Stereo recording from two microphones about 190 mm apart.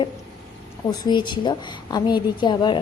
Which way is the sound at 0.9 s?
20° left (ahead or behind).